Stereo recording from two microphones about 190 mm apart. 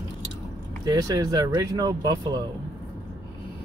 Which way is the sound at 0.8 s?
20° right (ahead or behind).